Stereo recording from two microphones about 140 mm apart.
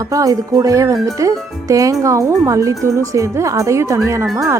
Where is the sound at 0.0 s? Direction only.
25° right (ahead or behind).